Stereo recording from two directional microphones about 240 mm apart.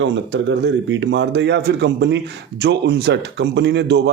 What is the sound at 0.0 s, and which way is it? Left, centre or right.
A man's voice, right.